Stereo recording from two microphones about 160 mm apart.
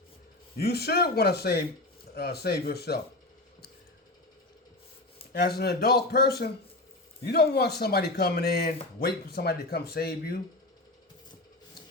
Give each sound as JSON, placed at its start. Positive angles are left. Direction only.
{"t": 0.5, "sound": "speech", "side_deg": 80}
{"t": 5.3, "sound": "speech", "side_deg": 80}